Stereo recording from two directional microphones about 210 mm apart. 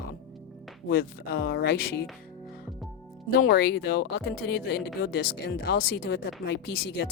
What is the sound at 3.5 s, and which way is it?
Speech, 50° left (ahead or behind).